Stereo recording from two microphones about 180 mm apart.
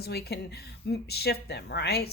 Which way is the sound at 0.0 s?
65° left (ahead or behind).